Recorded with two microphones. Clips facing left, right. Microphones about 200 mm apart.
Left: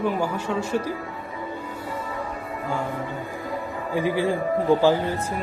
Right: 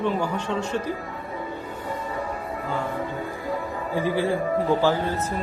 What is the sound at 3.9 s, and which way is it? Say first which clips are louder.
Speech: left 1 dB; 15° left (ahead or behind).